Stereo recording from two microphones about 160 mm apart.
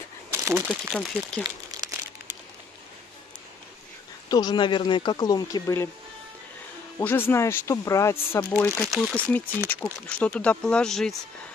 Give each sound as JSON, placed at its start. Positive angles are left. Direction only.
{"t": 0.3, "sound": "crumpling", "side_deg": -15}
{"t": 0.7, "sound": "speech", "side_deg": 5}
{"t": 1.7, "sound": "crumpling", "side_deg": -25}
{"t": 4.3, "sound": "speech", "side_deg": 25}
{"t": 7.0, "sound": "speech", "side_deg": 10}